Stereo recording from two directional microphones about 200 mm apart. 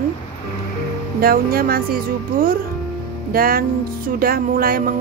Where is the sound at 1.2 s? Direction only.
45° right (ahead or behind).